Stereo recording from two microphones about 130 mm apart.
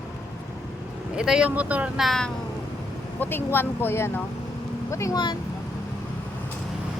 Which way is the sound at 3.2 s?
15° left (ahead or behind).